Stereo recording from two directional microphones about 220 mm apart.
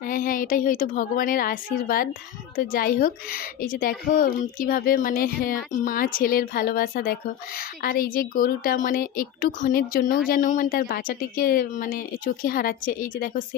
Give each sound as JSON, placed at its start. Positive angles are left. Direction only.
{"t": 0.1, "sound": "speech", "side_deg": 40}